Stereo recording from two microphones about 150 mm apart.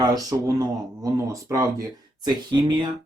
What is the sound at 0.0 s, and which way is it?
Speech, 25° right (ahead or behind).